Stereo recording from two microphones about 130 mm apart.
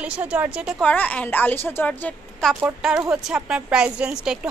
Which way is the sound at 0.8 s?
10° left (ahead or behind).